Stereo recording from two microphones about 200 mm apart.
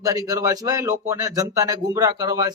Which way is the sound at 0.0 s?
15° right (ahead or behind).